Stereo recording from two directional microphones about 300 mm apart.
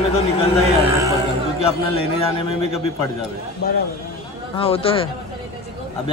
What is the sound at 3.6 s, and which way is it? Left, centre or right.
Speech, left.